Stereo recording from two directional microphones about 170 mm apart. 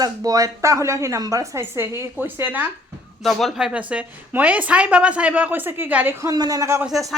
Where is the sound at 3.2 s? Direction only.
Centre (ahead or behind); by 6.9 s 15° right (ahead or behind).